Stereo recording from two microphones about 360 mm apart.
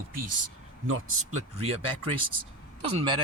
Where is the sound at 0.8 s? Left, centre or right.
Right.